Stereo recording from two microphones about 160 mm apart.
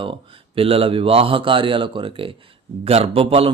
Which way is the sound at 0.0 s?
35° right (ahead or behind).